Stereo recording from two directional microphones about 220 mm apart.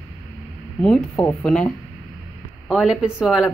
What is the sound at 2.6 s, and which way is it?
Speech, centre (ahead or behind).